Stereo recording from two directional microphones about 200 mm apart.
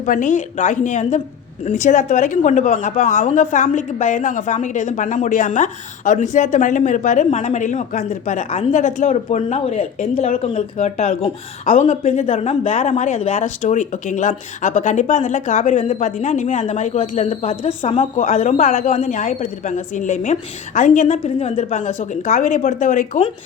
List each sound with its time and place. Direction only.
0.0 s speech: 40° left (ahead or behind)